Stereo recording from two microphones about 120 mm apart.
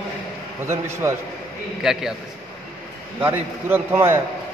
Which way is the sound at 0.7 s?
20° right (ahead or behind).